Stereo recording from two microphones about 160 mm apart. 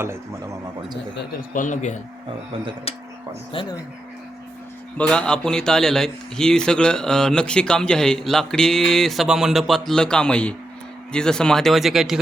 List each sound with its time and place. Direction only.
1.1 s a man's voice: 60° left (ahead or behind); by 3.8 s 30° left (ahead or behind)
4.9 s a man's voice: 5° left (ahead or behind)